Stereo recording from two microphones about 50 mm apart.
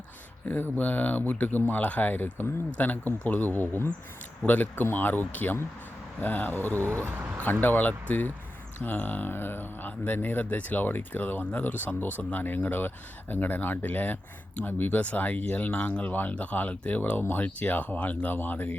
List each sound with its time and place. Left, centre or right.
0.4 s speech: left
6.8 s speech: right
7.6 s speech: left